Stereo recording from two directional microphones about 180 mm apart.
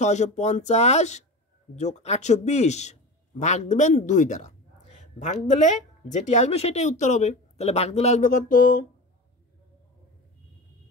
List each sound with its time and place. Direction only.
0.0 s speech: 40° left (ahead or behind)